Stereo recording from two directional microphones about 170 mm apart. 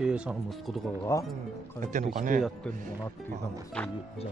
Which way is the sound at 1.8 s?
45° right (ahead or behind).